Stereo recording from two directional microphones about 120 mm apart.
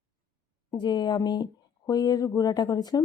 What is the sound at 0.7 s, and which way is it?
Speech, 35° left (ahead or behind).